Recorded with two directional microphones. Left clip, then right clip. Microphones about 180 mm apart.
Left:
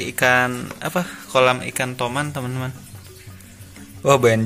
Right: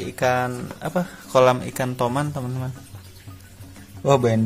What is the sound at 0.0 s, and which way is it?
Speech, 10° right (ahead or behind).